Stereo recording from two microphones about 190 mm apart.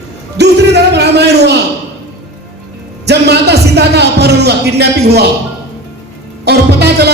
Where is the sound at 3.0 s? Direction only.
60° right (ahead or behind).